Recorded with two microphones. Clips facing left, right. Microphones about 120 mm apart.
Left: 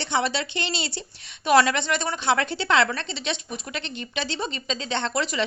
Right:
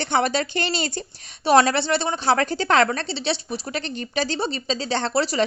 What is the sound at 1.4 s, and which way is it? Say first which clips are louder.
A woman's voice: right 2 dB; 35° right (ahead or behind).